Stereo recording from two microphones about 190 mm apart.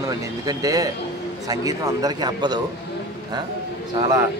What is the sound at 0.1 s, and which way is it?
Speech, 20° right (ahead or behind).